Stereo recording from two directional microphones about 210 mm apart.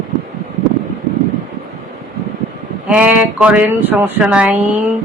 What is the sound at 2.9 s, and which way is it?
Speech, 5° right (ahead or behind).